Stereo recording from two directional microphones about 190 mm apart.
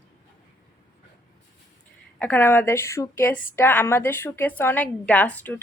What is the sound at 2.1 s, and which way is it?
A woman's voice, 10° left (ahead or behind).